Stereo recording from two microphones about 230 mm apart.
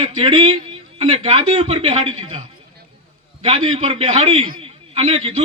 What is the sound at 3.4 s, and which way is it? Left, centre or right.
A man's voice, right.